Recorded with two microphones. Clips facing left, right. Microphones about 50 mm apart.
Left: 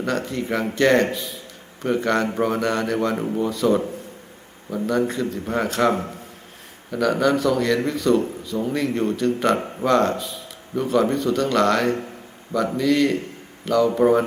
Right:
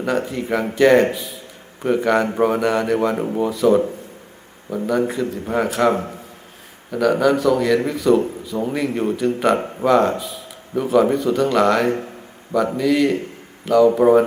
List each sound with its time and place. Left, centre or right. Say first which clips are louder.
0.0 s a man's voice: right 3 dB; centre
8.5 s speech: right 1 dB; centre
8.8 s speech: right 2 dB; centre